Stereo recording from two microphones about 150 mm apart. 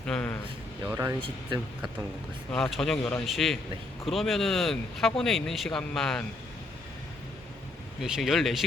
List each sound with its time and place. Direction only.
0.0 s a sound: 5° left (ahead or behind)
0.9 s speech: 20° right (ahead or behind)
2.5 s speech: centre (ahead or behind)
8.0 s speech: 5° right (ahead or behind)